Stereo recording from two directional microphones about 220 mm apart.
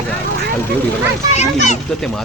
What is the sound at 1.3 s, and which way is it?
Speech, 30° left (ahead or behind).